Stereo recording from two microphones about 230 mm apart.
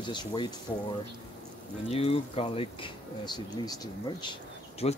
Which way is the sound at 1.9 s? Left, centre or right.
Left.